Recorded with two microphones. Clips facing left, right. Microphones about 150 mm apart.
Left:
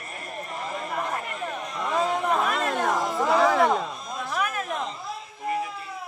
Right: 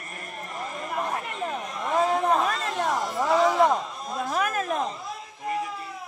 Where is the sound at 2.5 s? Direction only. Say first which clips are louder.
Left 2 dB; 65° left (ahead or behind).